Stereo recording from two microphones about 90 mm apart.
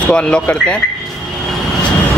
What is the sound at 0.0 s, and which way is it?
Speech, 10° left (ahead or behind).